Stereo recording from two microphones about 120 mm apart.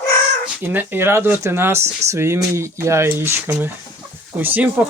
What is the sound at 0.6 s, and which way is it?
Speech, 20° right (ahead or behind).